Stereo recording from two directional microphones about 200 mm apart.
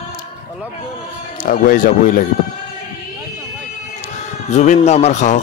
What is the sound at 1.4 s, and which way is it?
Speech, 45° left (ahead or behind).